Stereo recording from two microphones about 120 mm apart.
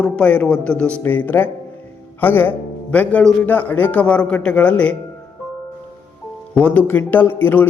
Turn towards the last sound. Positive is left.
turn(degrees=15)  # may be behind; listen again after turning